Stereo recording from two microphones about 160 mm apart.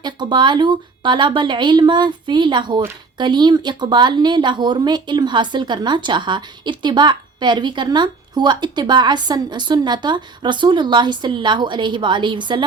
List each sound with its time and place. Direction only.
0.0 s speech: 30° right (ahead or behind)